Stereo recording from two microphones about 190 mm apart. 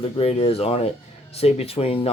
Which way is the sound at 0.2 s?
30° left (ahead or behind).